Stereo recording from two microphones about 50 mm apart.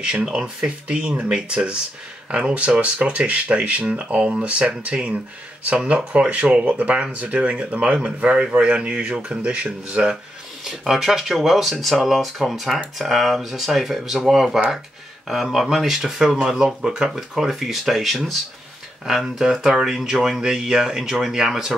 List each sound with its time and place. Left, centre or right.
0.0 s speech: centre
10.6 s speech: centre
17.1 s speech: centre